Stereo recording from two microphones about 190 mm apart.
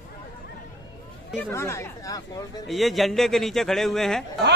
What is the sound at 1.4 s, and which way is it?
Speech, 15° left (ahead or behind).